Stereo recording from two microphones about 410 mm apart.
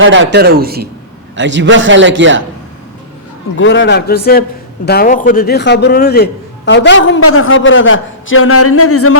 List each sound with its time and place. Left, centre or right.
0.0 s a man's voice: right
3.6 s a man's voice: left